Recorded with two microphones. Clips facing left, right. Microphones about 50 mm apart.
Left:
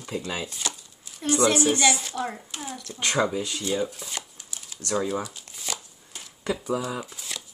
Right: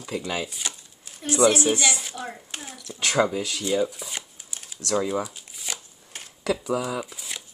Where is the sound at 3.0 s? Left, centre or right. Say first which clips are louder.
Right 2 dB; right.